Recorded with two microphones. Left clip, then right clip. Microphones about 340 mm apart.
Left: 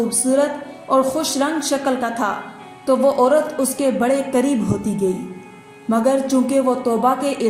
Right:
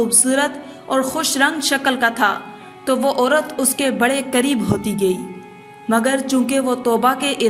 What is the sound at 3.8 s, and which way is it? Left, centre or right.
Speech, right.